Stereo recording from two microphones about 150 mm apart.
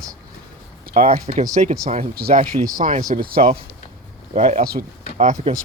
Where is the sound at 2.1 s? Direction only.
90° right.